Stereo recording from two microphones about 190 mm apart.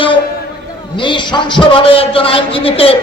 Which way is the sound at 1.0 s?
25° left (ahead or behind).